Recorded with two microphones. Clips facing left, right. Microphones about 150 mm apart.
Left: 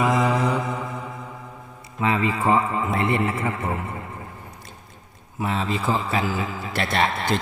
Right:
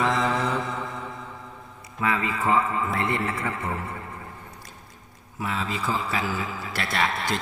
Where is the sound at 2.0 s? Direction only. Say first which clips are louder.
Left 4 dB; 25° left (ahead or behind).